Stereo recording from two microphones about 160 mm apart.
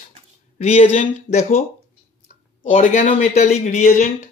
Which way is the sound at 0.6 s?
40° left (ahead or behind).